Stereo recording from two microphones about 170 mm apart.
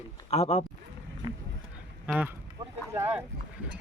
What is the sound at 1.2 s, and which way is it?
Speech, 30° right (ahead or behind).